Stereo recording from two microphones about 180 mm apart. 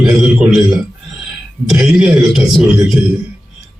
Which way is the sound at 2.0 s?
Centre (ahead or behind).